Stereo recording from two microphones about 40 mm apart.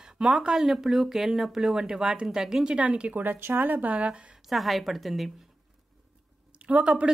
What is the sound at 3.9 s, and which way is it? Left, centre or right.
Speech, right.